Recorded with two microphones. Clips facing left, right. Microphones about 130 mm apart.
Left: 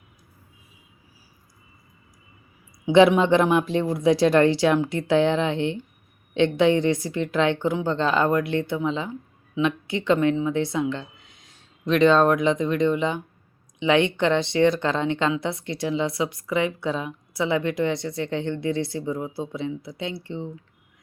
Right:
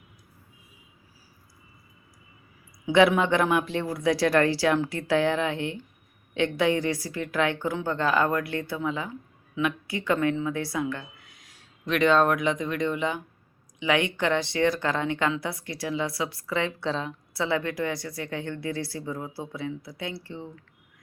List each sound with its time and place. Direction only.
2.8 s a woman's voice: 20° left (ahead or behind)